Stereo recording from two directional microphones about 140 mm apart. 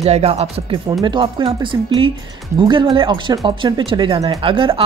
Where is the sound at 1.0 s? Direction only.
35° right (ahead or behind).